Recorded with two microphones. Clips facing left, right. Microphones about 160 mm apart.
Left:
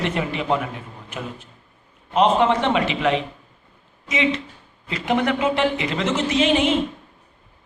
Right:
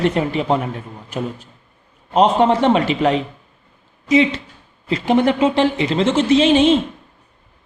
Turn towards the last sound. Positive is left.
turn(degrees=-30)  # may be behind; listen again after turning